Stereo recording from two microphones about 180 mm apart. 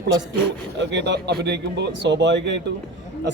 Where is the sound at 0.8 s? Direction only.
75° right (ahead or behind).